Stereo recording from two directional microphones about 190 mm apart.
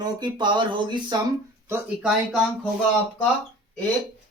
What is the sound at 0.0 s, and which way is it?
Speech, 25° right (ahead or behind).